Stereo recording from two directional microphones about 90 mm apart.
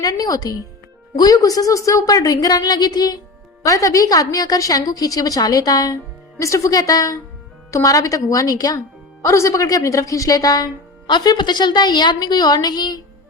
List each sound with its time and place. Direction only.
0.0 s a woman's voice: 45° left (ahead or behind)
3.6 s a woman's voice: 40° left (ahead or behind)